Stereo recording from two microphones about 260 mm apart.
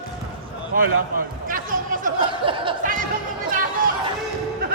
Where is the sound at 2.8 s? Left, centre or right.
Right.